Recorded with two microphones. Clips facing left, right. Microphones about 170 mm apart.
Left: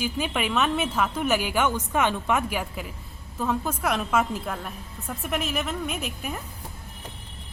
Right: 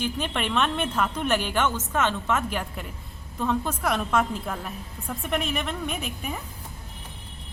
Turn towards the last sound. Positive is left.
turn(degrees=0)  # may be behind; listen again after turning